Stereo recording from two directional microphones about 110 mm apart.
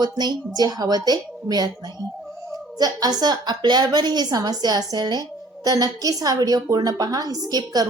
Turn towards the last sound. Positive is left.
turn(degrees=-35)  # may be behind; listen again after turning